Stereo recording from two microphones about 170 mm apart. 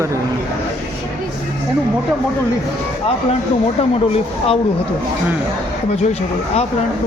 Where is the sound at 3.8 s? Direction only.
35° left (ahead or behind).